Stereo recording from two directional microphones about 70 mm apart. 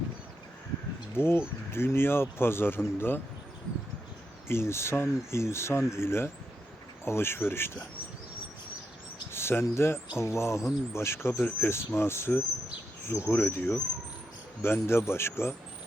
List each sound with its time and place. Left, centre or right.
1.1 s speech: left
4.4 s speech: left
9.3 s speech: left